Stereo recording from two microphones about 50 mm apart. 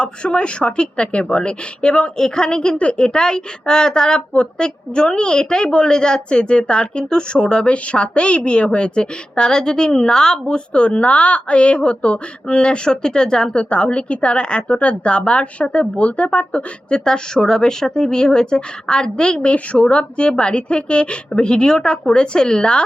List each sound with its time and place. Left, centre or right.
0.0 s speech: left